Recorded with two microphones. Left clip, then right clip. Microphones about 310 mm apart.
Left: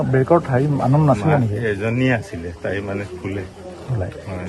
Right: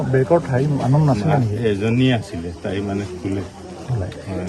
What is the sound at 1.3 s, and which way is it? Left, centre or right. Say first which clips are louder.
A man's voice: even; centre.